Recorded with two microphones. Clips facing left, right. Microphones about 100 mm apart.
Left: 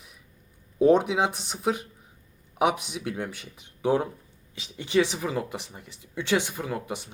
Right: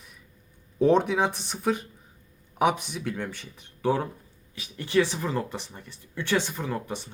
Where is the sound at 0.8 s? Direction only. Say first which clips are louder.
Left 1 dB; 10° left (ahead or behind).